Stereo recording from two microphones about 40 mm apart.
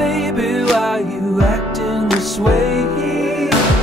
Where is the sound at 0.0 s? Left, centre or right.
Centre.